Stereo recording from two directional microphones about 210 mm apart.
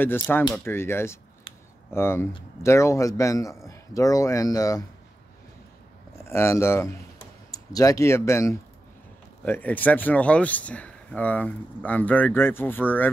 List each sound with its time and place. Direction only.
0.0 s speech: 10° left (ahead or behind)
6.2 s speech: 15° left (ahead or behind)